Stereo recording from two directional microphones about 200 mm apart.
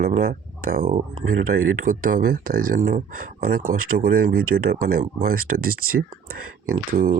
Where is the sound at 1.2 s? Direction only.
90° right.